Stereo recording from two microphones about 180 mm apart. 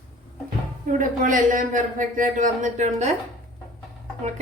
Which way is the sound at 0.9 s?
45° right (ahead or behind).